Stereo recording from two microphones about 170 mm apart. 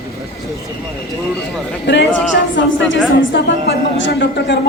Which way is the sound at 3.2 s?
90° left.